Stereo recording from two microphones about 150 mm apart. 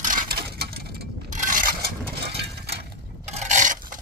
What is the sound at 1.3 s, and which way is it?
Coin, 60° right (ahead or behind).